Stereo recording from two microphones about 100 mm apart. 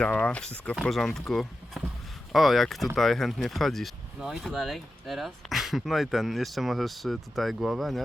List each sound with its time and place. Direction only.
0.0 s speech: 10° left (ahead or behind)